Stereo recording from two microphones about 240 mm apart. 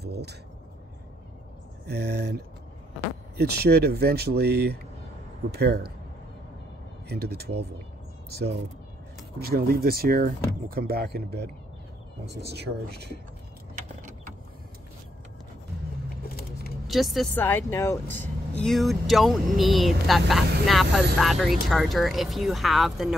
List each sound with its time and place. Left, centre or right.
0.0 s a sound: right
1.9 s speech: right
7.1 s speech: right
9.4 s speech: right
16.8 s speech: centre